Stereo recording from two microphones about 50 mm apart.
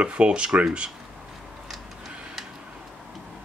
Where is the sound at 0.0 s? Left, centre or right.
Right.